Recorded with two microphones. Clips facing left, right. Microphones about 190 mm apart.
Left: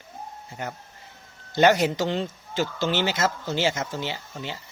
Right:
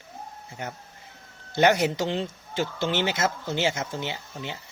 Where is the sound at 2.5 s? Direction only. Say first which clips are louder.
Left 1 dB; 25° right (ahead or behind).